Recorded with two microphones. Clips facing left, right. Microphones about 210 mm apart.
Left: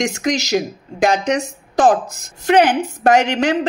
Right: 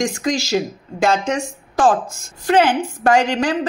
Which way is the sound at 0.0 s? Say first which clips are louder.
Left 1 dB; 20° left (ahead or behind).